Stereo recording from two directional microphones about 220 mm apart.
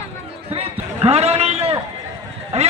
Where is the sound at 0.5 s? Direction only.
25° right (ahead or behind).